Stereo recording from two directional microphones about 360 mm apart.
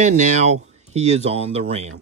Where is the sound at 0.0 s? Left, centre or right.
Centre.